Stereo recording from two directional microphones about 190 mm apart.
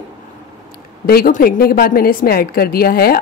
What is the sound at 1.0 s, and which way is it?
A woman's voice, 50° left (ahead or behind).